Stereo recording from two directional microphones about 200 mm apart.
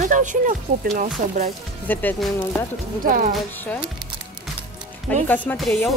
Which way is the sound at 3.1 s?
45° right (ahead or behind).